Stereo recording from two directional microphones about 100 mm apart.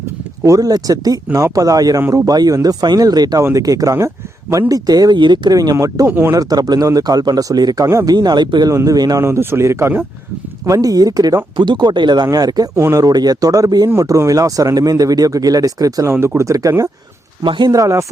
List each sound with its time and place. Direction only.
0.4 s speech: 35° right (ahead or behind)
4.7 s speech: 40° right (ahead or behind)
6.1 s speech: 20° right (ahead or behind)
6.3 s speech: 40° right (ahead or behind)
8.7 s speech: 35° right (ahead or behind)
10.7 s speech: 40° right (ahead or behind)
17.4 s speech: 55° right (ahead or behind)
17.7 s speech: 35° right (ahead or behind)